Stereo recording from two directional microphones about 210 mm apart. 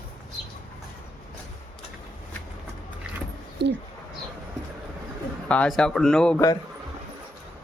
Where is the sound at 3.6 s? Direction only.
55° right (ahead or behind).